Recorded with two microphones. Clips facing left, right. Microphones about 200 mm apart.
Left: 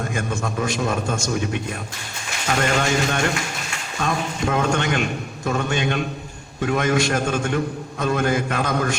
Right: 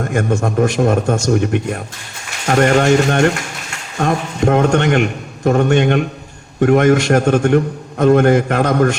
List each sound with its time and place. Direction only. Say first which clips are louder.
0.0 s a man's voice: right 8 dB; 60° right (ahead or behind)
2.8 s speech: right 9 dB; 45° right (ahead or behind)
4.6 s a man's voice: right 8 dB; 65° right (ahead or behind)